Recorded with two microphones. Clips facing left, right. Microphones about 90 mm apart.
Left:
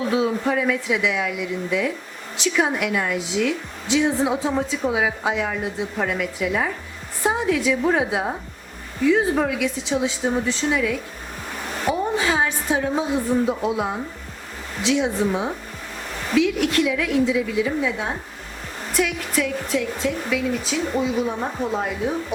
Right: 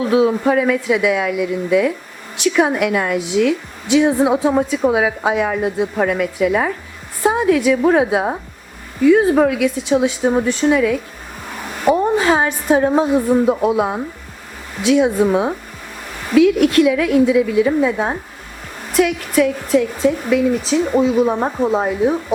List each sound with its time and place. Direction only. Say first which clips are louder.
0.1 s a woman's voice: right 8 dB; 60° right (ahead or behind); by 22.1 s 35° right (ahead or behind)